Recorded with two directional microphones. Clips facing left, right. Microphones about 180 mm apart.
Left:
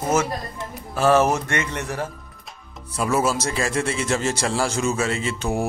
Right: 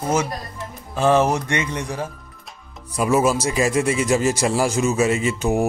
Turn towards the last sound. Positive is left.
turn(degrees=-15)  # may be behind; listen again after turning